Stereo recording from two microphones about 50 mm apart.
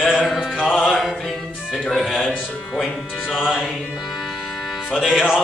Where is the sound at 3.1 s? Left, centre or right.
Left.